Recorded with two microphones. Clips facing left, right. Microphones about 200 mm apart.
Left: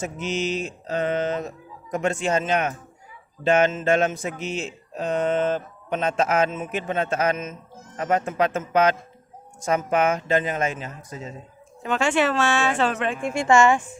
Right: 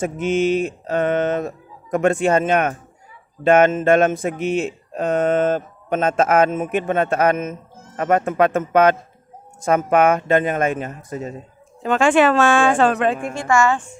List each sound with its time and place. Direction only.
0.0 s speech: 55° right (ahead or behind)
13.3 s a woman's voice: 20° left (ahead or behind)